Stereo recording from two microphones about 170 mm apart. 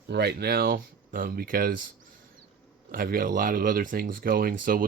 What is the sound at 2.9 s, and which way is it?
Speech, 55° right (ahead or behind).